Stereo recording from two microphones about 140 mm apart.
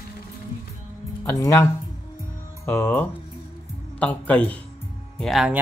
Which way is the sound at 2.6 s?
15° left (ahead or behind).